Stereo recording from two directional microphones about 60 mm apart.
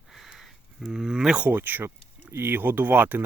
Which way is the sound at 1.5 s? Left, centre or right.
Right.